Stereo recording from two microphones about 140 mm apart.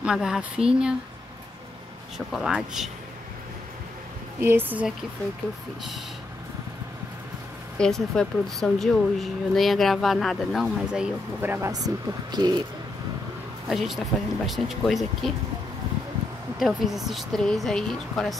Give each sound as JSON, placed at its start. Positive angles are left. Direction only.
{"t": 0.0, "sound": "speech", "side_deg": -5}
{"t": 2.1, "sound": "speech", "side_deg": 0}
{"t": 4.4, "sound": "a woman's voice", "side_deg": -15}
{"t": 7.8, "sound": "speech", "side_deg": 5}
{"t": 11.7, "sound": "speech", "side_deg": -30}
{"t": 13.7, "sound": "speech", "side_deg": 0}
{"t": 16.5, "sound": "speech", "side_deg": 0}